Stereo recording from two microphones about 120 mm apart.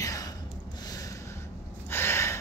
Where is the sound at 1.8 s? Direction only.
20° left (ahead or behind).